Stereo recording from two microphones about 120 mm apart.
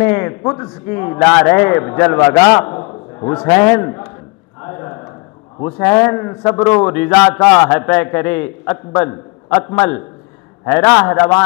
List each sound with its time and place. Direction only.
0.0 s a man's voice: 15° left (ahead or behind)
4.6 s a sound: 20° left (ahead or behind)
5.6 s a man's voice: 20° left (ahead or behind)